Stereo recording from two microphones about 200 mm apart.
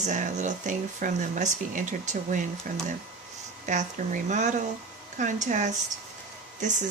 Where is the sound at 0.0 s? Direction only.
35° right (ahead or behind).